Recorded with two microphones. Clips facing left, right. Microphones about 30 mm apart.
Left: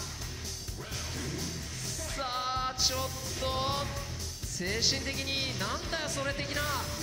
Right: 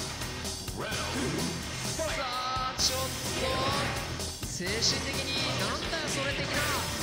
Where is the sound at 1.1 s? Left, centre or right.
Right.